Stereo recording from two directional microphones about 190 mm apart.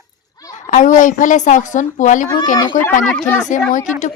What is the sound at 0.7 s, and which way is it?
A woman's voice, 40° left (ahead or behind).